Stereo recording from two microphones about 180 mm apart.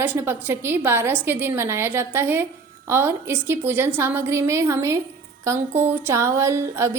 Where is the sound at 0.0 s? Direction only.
10° right (ahead or behind).